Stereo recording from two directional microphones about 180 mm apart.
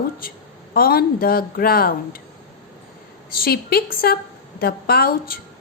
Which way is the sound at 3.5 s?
60° left (ahead or behind).